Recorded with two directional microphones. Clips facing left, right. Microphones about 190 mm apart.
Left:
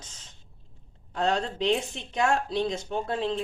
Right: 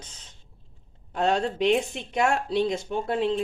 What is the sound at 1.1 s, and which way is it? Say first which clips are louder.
Speech: right 3 dB; 20° right (ahead or behind).